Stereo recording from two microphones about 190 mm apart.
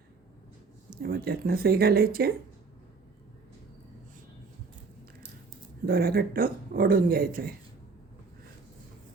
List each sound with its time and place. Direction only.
1.0 s speech: 50° right (ahead or behind)
5.8 s speech: 50° right (ahead or behind)